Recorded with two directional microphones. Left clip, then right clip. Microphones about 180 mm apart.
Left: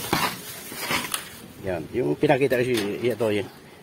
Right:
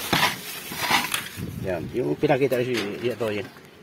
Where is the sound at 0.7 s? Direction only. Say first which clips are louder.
Right 5 dB; 40° right (ahead or behind).